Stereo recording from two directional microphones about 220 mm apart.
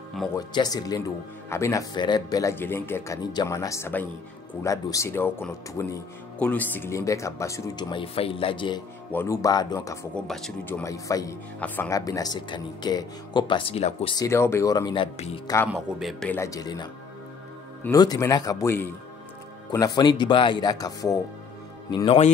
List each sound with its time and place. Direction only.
0.5 s speech: 20° left (ahead or behind)
10.1 s speech: centre (ahead or behind); by 14.1 s 25° left (ahead or behind)
14.1 s speech: 15° left (ahead or behind)
15.1 s speech: 30° left (ahead or behind)
15.4 s speech: 10° left (ahead or behind)
15.7 s speech: centre (ahead or behind); by 22.3 s 25° left (ahead or behind)